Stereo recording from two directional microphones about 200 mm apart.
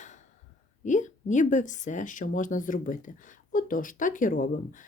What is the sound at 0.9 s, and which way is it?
Speech, 35° left (ahead or behind).